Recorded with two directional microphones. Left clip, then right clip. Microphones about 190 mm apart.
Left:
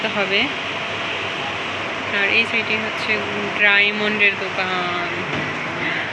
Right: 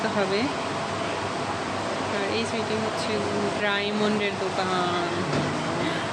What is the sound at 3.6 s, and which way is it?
Speech, 15° right (ahead or behind).